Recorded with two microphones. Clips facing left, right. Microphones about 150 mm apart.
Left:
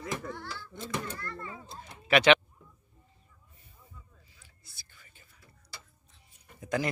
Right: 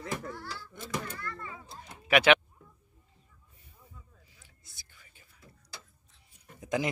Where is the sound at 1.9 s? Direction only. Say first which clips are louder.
Left 1 dB; 10° right (ahead or behind).